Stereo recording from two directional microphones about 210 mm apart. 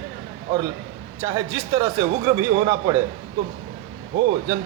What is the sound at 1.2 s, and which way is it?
A man's voice, 15° right (ahead or behind).